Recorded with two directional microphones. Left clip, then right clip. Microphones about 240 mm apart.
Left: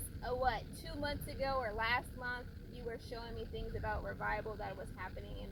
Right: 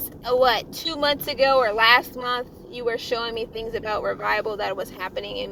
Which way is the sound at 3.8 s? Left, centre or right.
Centre.